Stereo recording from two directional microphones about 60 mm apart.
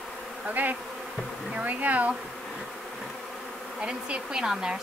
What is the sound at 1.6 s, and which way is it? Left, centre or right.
Speech, right.